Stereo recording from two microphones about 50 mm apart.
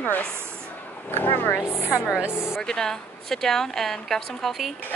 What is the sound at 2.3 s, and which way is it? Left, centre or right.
Speech, left.